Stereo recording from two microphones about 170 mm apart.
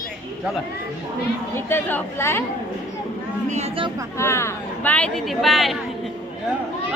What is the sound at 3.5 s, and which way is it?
Speech, 40° right (ahead or behind).